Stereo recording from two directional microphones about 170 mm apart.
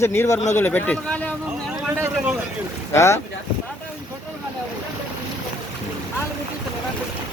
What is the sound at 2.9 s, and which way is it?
Speech, 15° left (ahead or behind).